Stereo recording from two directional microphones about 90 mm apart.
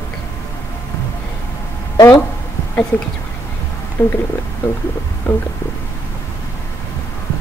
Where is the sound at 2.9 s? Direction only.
20° left (ahead or behind).